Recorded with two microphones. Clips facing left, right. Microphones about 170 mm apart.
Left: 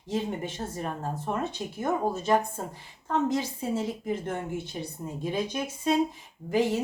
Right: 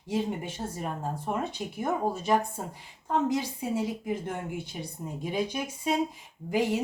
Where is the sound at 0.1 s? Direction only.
10° right (ahead or behind).